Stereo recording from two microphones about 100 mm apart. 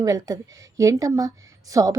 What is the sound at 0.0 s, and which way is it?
A woman's voice, 35° right (ahead or behind).